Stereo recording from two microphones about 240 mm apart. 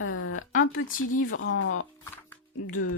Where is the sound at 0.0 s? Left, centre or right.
Left.